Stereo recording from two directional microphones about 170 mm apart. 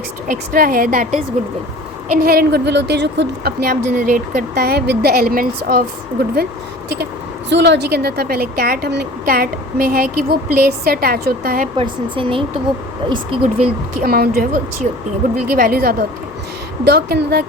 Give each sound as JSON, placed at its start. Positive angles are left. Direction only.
{"t": 0.3, "sound": "a woman's voice", "side_deg": -55}
{"t": 2.2, "sound": "a woman's voice", "side_deg": -65}
{"t": 3.8, "sound": "a woman's voice", "side_deg": -50}
{"t": 7.5, "sound": "a woman's voice", "side_deg": -90}
{"t": 11.8, "sound": "speech", "side_deg": -30}
{"t": 14.0, "sound": "a woman's voice", "side_deg": -65}
{"t": 16.8, "sound": "a woman's voice", "side_deg": -80}